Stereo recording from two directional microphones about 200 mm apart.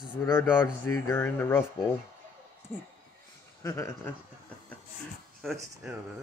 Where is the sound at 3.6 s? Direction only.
15° left (ahead or behind).